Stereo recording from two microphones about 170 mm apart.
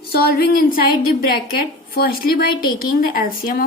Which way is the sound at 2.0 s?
60° left (ahead or behind).